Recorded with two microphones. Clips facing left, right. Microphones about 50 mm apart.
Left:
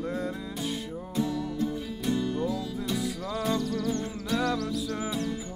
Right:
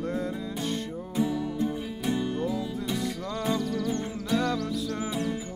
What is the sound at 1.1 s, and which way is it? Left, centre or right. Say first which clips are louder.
Music: right 2 dB; centre.